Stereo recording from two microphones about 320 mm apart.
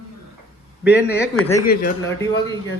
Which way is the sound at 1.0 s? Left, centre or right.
Centre.